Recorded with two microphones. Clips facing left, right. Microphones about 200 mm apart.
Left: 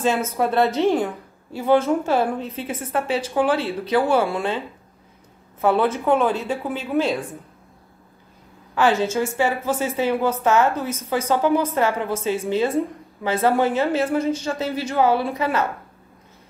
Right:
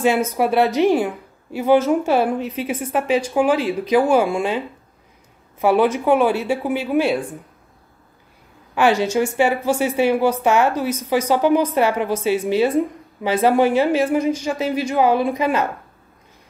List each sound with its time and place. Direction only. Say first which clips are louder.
0.0 s speech: right 3 dB; 15° right (ahead or behind)
8.7 s speech: right 2 dB; 15° right (ahead or behind)